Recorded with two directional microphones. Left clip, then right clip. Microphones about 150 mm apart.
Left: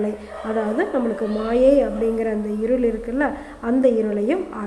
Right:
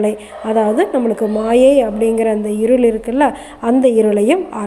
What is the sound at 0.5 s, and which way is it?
A woman's voice, 20° right (ahead or behind).